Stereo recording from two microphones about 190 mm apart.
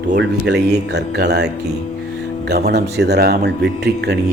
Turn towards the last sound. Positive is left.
turn(degrees=-60)  # may be behind; listen again after turning